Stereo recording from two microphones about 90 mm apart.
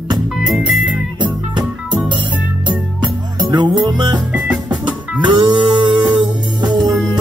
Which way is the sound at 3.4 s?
50° right (ahead or behind).